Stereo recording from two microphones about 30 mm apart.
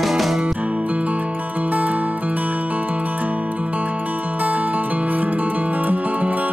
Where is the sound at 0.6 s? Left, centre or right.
Right.